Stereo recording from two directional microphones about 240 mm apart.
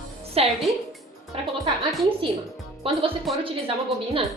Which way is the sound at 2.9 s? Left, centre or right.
Right.